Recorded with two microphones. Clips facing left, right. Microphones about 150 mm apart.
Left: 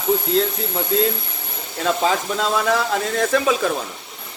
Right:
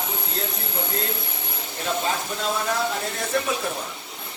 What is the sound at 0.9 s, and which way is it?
Speech, 90° left.